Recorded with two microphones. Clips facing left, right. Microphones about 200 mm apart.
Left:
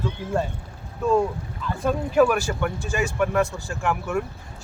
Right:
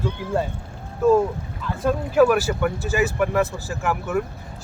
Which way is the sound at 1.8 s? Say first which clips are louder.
Right 2 dB; 5° right (ahead or behind).